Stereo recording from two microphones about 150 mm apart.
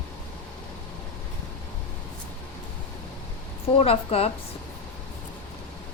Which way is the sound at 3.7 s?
40° left (ahead or behind).